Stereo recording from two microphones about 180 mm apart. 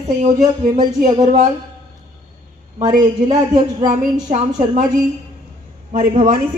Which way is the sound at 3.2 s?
25° right (ahead or behind).